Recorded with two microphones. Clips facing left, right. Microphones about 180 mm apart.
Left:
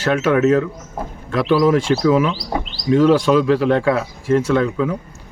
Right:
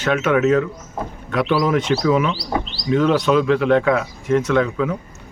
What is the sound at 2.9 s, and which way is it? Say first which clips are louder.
Speech: left 3 dB; 35° left (ahead or behind).